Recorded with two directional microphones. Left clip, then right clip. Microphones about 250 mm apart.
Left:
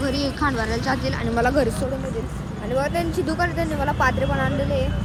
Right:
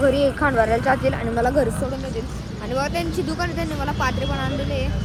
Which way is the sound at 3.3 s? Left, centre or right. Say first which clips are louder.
Left 2 dB; centre.